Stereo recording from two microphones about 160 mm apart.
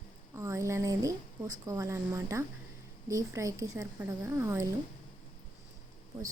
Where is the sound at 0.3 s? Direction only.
20° right (ahead or behind).